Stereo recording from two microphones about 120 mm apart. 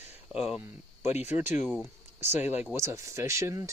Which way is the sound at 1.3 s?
20° right (ahead or behind).